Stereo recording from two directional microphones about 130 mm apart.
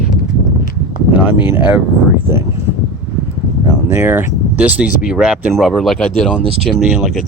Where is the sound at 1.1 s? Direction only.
15° right (ahead or behind).